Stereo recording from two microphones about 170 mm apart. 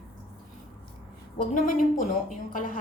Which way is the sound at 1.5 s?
50° left (ahead or behind).